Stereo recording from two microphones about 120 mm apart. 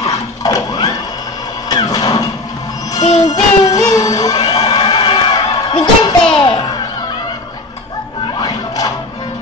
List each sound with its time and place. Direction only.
0.0 s printer: 30° left (ahead or behind)
1.7 s music: 35° left (ahead or behind)
3.3 s music: 30° left (ahead or behind); by 6.7 s 45° left (ahead or behind)
8.4 s music: 30° left (ahead or behind)